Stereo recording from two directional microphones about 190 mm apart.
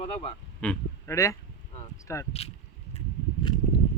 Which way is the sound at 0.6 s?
10° left (ahead or behind).